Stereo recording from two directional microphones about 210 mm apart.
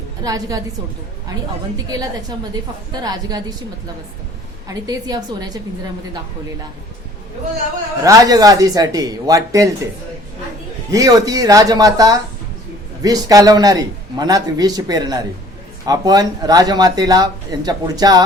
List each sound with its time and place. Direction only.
0.2 s a man's voice: 15° right (ahead or behind)
1.7 s a man's voice: 15° right (ahead or behind)
4.7 s a man's voice: 20° right (ahead or behind)
8.0 s a man's voice: 15° right (ahead or behind)
10.9 s a man's voice: 15° right (ahead or behind)